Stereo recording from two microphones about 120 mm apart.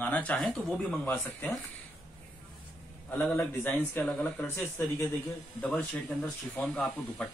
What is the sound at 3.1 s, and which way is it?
Speech, 15° left (ahead or behind).